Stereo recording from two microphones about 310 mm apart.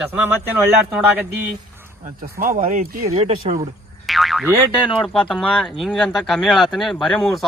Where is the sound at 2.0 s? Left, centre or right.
Right.